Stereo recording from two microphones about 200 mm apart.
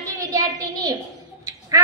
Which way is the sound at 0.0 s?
15° right (ahead or behind).